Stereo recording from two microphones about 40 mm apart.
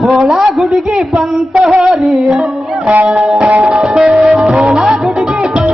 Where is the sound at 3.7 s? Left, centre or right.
Centre.